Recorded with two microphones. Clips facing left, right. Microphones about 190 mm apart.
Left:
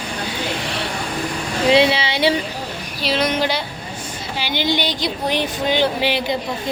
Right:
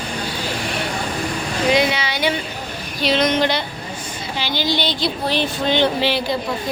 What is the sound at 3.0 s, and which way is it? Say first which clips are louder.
Speech: right 2 dB; 5° left (ahead or behind).